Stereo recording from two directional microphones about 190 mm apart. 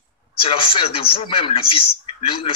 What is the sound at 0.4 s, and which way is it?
A man's voice, 30° left (ahead or behind).